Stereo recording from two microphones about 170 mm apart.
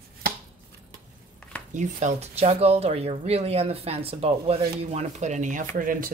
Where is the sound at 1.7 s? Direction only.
45° right (ahead or behind).